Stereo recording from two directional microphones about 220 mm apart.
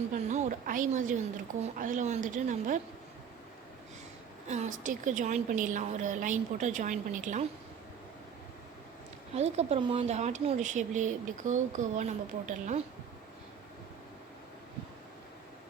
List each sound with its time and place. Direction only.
0.1 s speech: 35° right (ahead or behind)
4.4 s speech: 30° right (ahead or behind)
9.3 s speech: 30° right (ahead or behind)